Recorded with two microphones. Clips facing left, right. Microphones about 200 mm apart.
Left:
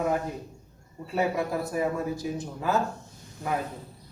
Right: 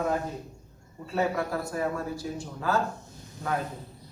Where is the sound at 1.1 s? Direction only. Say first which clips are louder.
Left 1 dB; 15° left (ahead or behind).